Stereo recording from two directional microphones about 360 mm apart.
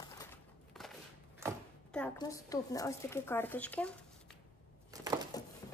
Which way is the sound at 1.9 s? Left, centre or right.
Centre.